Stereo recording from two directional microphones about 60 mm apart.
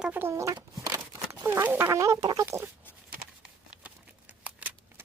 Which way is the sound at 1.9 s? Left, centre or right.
Right.